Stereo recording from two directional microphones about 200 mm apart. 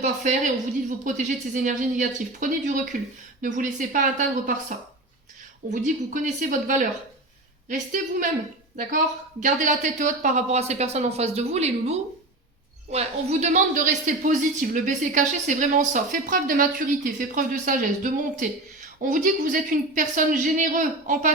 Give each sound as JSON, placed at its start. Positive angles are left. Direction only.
{"t": 0.0, "sound": "speech", "side_deg": -40}
{"t": 5.7, "sound": "speech", "side_deg": -40}